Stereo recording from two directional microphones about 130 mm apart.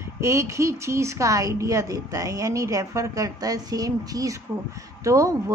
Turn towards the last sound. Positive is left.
turn(degrees=-25)  # may be behind; listen again after turning